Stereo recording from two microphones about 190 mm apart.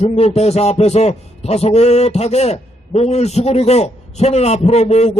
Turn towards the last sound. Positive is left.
turn(degrees=35)  # may be behind; listen again after turning